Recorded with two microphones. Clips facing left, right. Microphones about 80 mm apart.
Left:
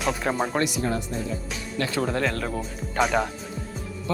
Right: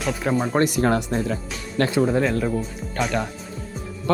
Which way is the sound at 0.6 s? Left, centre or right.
Right.